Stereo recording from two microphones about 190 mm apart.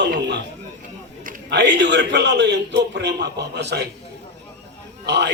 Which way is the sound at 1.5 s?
65° right (ahead or behind).